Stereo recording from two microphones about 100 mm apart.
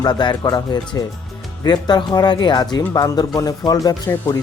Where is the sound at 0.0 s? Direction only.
50° left (ahead or behind).